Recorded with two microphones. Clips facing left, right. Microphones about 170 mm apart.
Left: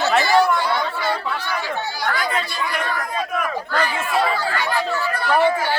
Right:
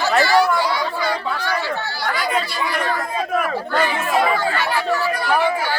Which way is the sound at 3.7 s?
20° right (ahead or behind).